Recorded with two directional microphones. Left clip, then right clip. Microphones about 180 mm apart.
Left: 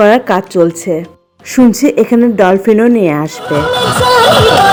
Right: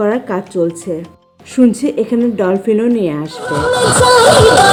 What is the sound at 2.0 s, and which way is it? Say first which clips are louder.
Speech: left 6 dB; 20° left (ahead or behind).